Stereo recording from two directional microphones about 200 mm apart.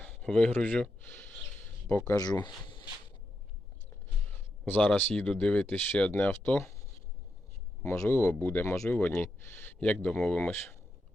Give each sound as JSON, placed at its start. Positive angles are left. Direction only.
{"t": 0.0, "sound": "speech", "side_deg": 5}
{"t": 4.6, "sound": "speech", "side_deg": 10}
{"t": 7.8, "sound": "speech", "side_deg": 15}